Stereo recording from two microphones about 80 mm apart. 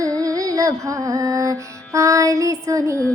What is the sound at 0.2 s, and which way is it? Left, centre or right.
Music, right.